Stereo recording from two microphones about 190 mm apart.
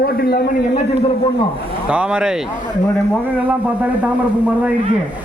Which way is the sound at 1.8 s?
5° right (ahead or behind).